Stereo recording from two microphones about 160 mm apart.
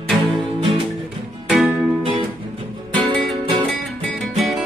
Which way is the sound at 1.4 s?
5° right (ahead or behind).